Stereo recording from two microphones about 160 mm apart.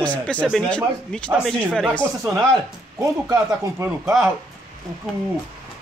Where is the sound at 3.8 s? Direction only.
20° right (ahead or behind).